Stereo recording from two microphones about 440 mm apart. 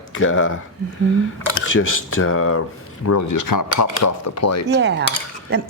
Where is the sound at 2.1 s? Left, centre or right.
Left.